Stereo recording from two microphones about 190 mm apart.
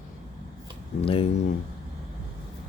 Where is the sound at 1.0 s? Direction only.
30° left (ahead or behind).